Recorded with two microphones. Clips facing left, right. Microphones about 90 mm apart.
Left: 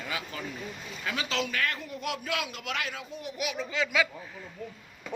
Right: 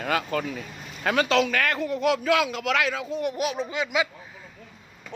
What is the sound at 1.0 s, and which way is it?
A man's voice, 75° right (ahead or behind).